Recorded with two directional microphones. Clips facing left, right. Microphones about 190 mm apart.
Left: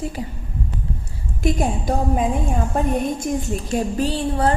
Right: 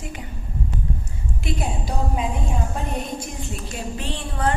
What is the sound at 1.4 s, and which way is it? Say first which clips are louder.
A woman's voice: left 8 dB; 45° left (ahead or behind).